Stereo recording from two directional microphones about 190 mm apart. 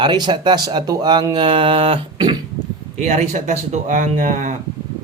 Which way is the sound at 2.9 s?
40° right (ahead or behind).